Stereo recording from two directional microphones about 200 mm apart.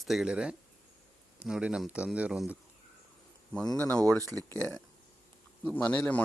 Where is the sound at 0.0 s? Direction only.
Centre (ahead or behind).